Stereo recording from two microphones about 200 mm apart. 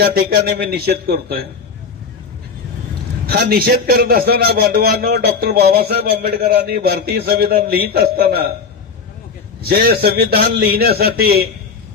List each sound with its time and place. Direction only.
0.0 s a man's voice: 50° right (ahead or behind)
3.2 s a man's voice: 50° right (ahead or behind)
9.6 s a man's voice: 55° right (ahead or behind)